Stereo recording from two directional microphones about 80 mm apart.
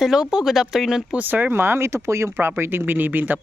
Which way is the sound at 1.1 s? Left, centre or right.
Right.